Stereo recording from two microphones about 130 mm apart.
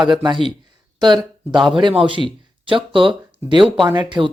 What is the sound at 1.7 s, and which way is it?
Speech, 40° right (ahead or behind).